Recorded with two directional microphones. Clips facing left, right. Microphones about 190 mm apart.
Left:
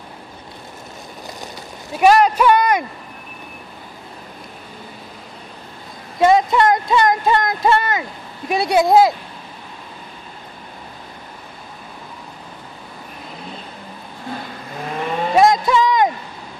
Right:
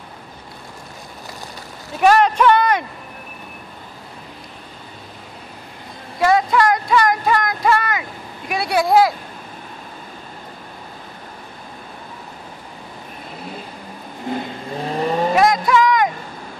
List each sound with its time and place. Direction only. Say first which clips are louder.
2.0 s a man's voice: left 1 dB; 10° left (ahead or behind)
6.1 s speech: left 2 dB; 20° left (ahead or behind)
14.8 s vehicle: right 3 dB; 35° right (ahead or behind)
15.3 s speech: left 4 dB; 25° left (ahead or behind)